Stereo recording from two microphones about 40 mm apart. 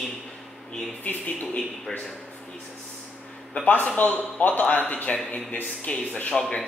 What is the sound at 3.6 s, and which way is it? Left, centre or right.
A man's voice, left.